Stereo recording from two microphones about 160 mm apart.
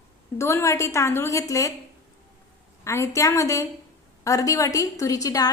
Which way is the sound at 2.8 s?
20° left (ahead or behind).